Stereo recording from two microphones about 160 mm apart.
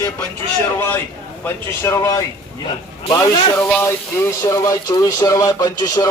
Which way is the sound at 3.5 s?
10° left (ahead or behind).